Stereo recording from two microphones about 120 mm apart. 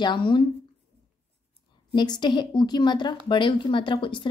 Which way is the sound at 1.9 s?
40° left (ahead or behind).